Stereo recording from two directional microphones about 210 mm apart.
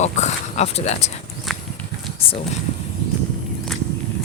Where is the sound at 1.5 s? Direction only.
Centre (ahead or behind).